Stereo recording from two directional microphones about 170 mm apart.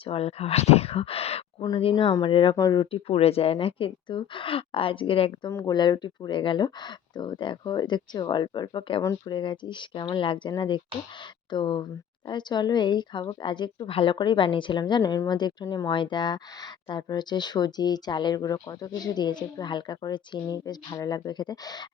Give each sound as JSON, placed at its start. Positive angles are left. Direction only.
{"t": 0.0, "sound": "speech", "side_deg": 35}
{"t": 2.9, "sound": "speech", "side_deg": 35}
{"t": 5.5, "sound": "speech", "side_deg": 20}